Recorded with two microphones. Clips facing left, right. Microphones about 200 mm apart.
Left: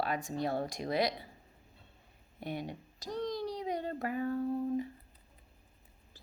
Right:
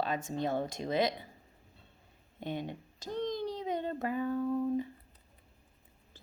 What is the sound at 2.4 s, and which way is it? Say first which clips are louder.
A child's voice: right 2 dB; 20° right (ahead or behind).